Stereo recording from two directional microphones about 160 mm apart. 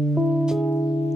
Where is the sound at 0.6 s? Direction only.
15° left (ahead or behind).